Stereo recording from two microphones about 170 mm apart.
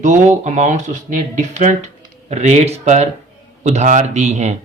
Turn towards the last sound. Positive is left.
turn(degrees=-40)  # may be behind; listen again after turning